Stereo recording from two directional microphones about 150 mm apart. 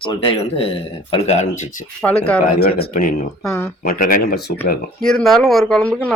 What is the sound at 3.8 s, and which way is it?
Speech, 70° left (ahead or behind).